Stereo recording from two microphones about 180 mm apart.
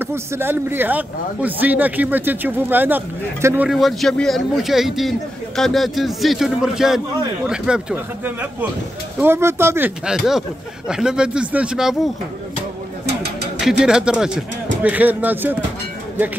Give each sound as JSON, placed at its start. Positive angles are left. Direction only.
{"t": 0.0, "sound": "speech", "side_deg": -15}
{"t": 13.0, "sound": "a sound", "side_deg": -65}
{"t": 13.6, "sound": "speech", "side_deg": -5}